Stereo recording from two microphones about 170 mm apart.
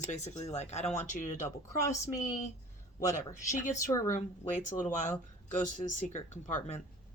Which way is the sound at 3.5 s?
50° left (ahead or behind).